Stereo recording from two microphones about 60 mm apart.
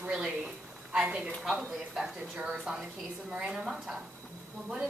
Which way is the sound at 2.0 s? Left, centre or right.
Centre.